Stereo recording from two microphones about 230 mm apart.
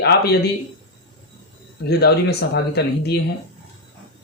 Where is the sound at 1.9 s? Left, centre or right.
Left.